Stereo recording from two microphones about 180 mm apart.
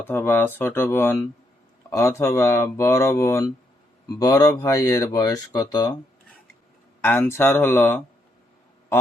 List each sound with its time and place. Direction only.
0.0 s speech: 10° left (ahead or behind)
7.0 s speech: 10° left (ahead or behind)